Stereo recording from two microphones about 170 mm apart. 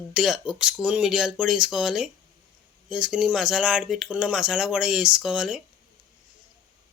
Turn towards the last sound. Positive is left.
turn(degrees=-5)  # may be behind; listen again after turning